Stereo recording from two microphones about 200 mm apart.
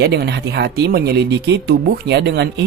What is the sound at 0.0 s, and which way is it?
Speech, 55° right (ahead or behind).